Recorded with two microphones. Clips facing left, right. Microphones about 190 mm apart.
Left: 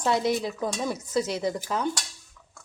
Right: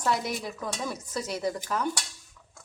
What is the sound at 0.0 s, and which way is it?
A woman's voice, 25° left (ahead or behind).